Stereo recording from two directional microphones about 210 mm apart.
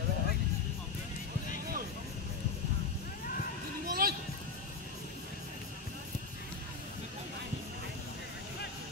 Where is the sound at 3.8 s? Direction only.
45° right (ahead or behind).